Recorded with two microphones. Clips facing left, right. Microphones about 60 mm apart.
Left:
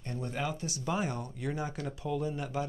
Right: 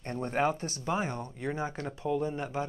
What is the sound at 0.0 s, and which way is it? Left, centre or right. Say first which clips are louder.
Speech: right 6 dB; right.